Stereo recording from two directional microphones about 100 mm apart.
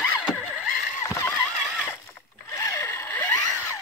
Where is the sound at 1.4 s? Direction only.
Centre (ahead or behind).